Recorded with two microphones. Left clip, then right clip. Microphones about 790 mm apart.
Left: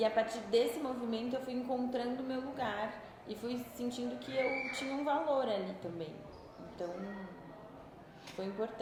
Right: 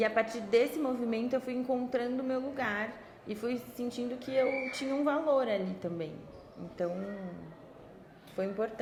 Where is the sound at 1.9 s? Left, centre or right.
Right.